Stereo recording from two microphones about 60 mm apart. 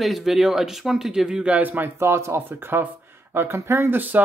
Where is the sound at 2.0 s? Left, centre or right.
Right.